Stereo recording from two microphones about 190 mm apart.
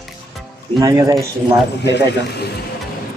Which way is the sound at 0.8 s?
20° right (ahead or behind).